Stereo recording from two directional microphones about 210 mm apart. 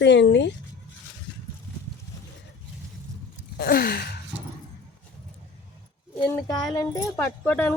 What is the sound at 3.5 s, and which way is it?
Gasp, 45° left (ahead or behind).